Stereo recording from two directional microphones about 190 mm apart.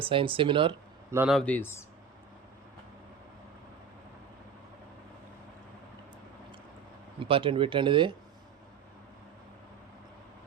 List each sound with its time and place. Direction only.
0.0 s speech: 25° right (ahead or behind)
1.3 s speech: 5° left (ahead or behind)
7.2 s speech: 30° right (ahead or behind)